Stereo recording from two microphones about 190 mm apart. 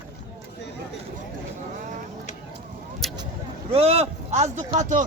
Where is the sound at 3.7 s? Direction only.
30° right (ahead or behind).